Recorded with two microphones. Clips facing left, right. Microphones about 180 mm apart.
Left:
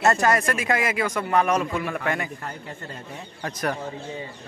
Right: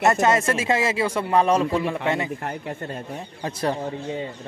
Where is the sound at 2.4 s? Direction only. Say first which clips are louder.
Right 6 dB; 60° right (ahead or behind).